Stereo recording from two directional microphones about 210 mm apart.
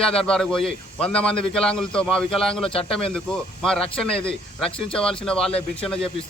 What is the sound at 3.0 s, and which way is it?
Speech, 5° left (ahead or behind).